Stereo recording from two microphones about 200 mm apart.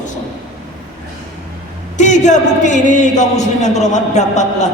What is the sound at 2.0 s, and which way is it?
A man's voice, 35° left (ahead or behind).